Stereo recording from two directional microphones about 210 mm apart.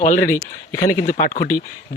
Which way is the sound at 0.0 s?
40° left (ahead or behind).